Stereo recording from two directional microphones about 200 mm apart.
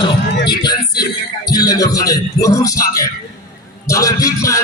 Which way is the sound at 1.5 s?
20° left (ahead or behind).